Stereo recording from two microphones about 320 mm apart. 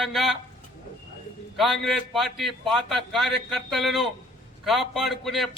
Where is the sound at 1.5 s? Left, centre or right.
Centre.